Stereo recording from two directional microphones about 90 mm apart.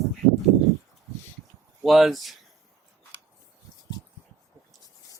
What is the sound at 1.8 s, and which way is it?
Speech, centre (ahead or behind).